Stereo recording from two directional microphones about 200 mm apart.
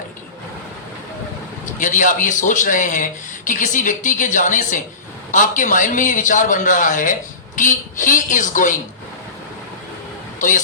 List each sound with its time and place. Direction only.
1.6 s a man's voice: 40° left (ahead or behind)